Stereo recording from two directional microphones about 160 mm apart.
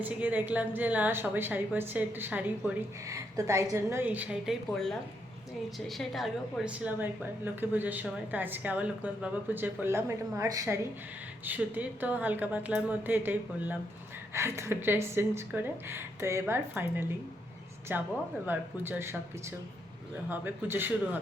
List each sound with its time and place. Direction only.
0.0 s a woman's voice: 10° right (ahead or behind)
6.0 s a woman's voice: centre (ahead or behind)
20.3 s a woman's voice: 15° right (ahead or behind)